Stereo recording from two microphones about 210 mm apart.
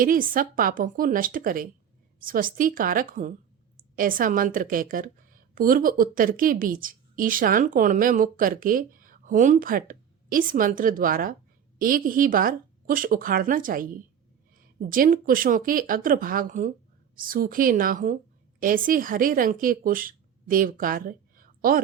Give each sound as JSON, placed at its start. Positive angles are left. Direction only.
{"t": 0.0, "sound": "a woman's voice", "side_deg": -40}